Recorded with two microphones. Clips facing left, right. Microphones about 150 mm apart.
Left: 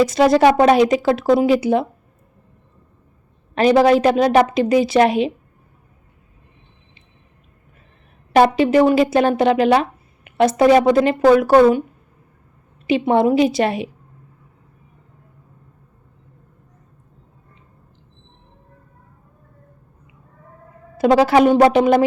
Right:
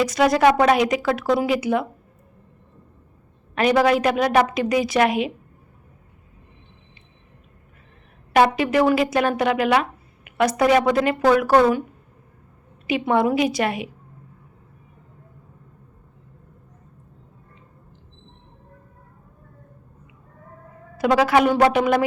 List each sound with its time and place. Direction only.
0.0 s speech: 25° left (ahead or behind)
3.5 s speech: 30° left (ahead or behind)
8.3 s speech: 30° left (ahead or behind)
10.2 s a sound: 30° left (ahead or behind)
10.6 s speech: 30° left (ahead or behind)
12.9 s speech: 25° left (ahead or behind)
21.0 s speech: 30° left (ahead or behind)